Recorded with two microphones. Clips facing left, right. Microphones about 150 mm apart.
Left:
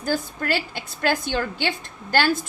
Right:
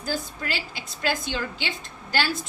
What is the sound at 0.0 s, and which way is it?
A woman's voice, 50° left (ahead or behind).